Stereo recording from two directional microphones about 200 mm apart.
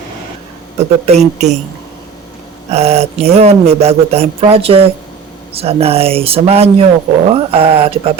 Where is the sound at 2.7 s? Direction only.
30° right (ahead or behind).